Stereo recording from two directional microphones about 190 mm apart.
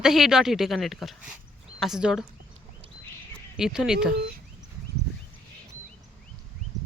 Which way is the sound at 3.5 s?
5° right (ahead or behind).